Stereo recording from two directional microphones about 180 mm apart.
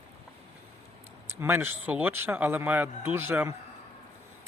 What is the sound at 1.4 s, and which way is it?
Speech, 15° right (ahead or behind).